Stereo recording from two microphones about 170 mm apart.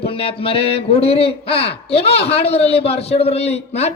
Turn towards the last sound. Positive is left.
turn(degrees=40)  # may be behind; listen again after turning